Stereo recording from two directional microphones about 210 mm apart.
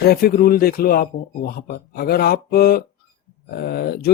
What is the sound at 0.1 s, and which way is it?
Speech, 50° left (ahead or behind).